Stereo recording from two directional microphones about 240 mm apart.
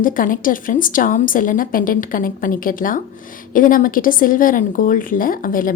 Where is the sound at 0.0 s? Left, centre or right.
Left.